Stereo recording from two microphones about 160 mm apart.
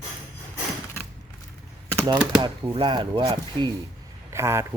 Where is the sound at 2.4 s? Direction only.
30° right (ahead or behind).